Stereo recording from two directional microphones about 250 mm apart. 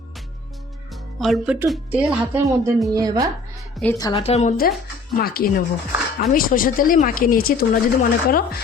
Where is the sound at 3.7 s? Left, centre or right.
Centre.